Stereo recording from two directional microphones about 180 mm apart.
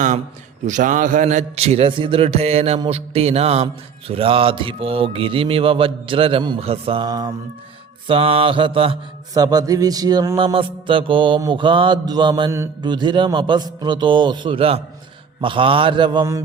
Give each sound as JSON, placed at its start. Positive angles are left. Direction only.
{"t": 0.7, "sound": "a man's voice", "side_deg": -45}
{"t": 8.0, "sound": "a man's voice", "side_deg": -30}
{"t": 9.3, "sound": "music", "side_deg": -20}